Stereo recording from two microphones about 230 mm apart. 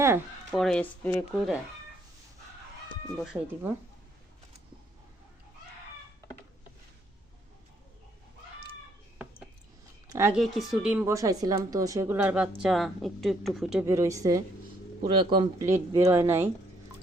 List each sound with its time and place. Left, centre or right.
0.5 s speech: centre
3.3 s a woman's voice: centre
9.1 s a sound: centre
10.1 s a woman's voice: centre
10.4 s a woman's voice: centre